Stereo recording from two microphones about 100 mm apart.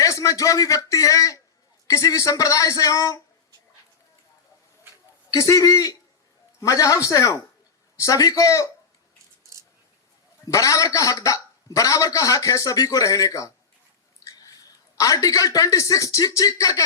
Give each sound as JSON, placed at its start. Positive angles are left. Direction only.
{"t": 0.0, "sound": "a man's voice", "side_deg": 35}
{"t": 5.3, "sound": "a man's voice", "side_deg": 35}
{"t": 9.4, "sound": "a sound", "side_deg": -30}
{"t": 10.4, "sound": "a man's voice", "side_deg": 35}
{"t": 14.3, "sound": "a sound", "side_deg": 35}
{"t": 14.9, "sound": "a man's voice", "side_deg": 35}